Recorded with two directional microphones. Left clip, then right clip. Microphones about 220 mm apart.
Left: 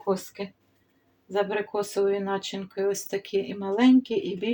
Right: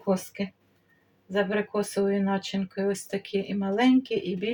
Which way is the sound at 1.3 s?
15° left (ahead or behind).